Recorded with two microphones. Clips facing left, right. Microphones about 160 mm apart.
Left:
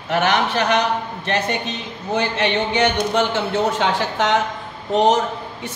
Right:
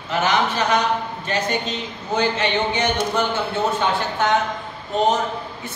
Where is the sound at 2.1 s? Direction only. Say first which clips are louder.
Even; 65° left (ahead or behind); by 4.4 s 90° left.